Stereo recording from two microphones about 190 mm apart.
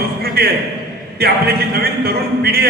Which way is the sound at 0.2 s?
55° right (ahead or behind).